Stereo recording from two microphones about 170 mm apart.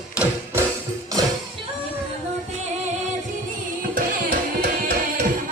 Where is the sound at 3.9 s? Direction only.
65° right (ahead or behind).